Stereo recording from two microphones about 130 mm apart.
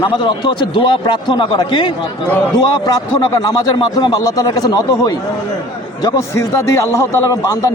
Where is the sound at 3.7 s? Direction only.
30° left (ahead or behind).